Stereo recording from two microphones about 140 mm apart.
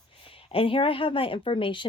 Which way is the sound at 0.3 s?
40° left (ahead or behind).